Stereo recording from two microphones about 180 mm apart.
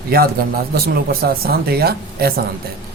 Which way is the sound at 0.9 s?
60° right (ahead or behind).